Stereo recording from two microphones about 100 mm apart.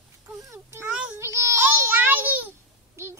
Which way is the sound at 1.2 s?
30° right (ahead or behind).